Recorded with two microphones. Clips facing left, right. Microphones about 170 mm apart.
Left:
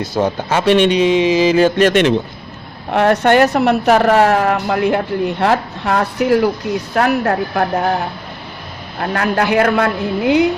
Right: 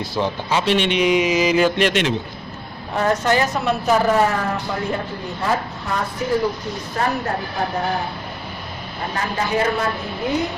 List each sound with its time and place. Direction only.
0.2 s speech: 50° left (ahead or behind)
0.9 s a sound: 30° left (ahead or behind)
1.7 s speech: 50° left (ahead or behind)
2.9 s a woman's voice: 70° left (ahead or behind)
9.0 s a woman's voice: 70° left (ahead or behind)